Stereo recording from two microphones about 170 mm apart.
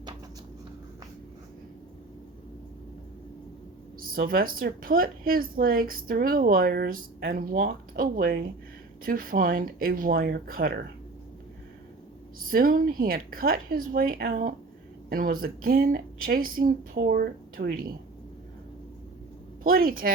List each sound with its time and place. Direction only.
4.0 s speech: 60° right (ahead or behind)
12.4 s speech: 55° right (ahead or behind)
19.6 s speech: 60° right (ahead or behind)